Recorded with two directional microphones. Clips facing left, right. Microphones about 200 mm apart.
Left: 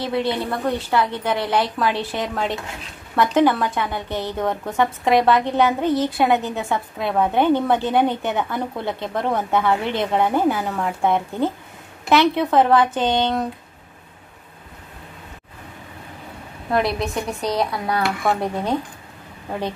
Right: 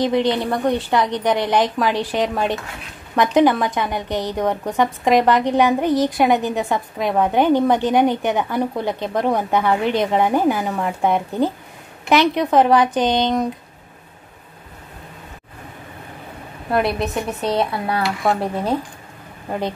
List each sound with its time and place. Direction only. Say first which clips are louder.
0.0 s a woman's voice: right 4 dB; 15° right (ahead or behind)
16.7 s a woman's voice: right 1 dB; 5° right (ahead or behind)